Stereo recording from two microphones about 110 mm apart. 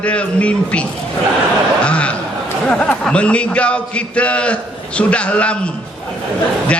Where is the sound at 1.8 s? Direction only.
10° left (ahead or behind).